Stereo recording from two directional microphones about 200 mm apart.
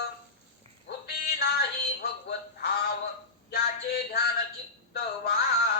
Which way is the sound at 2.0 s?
55° left (ahead or behind).